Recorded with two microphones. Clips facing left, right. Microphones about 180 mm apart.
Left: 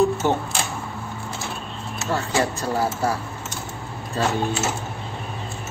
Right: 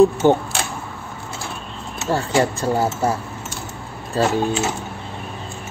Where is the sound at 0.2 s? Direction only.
30° right (ahead or behind).